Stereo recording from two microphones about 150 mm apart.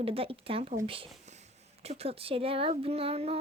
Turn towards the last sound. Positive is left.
turn(degrees=-40)  # may be behind; listen again after turning